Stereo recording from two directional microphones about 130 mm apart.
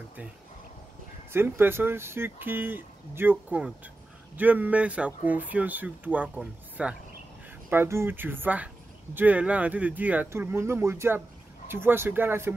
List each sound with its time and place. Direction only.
1.3 s speech: 15° right (ahead or behind)